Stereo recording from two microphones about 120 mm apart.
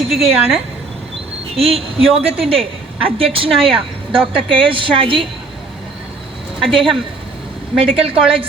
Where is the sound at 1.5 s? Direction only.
55° right (ahead or behind).